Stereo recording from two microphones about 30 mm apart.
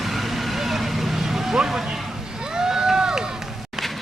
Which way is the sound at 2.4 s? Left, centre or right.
Right.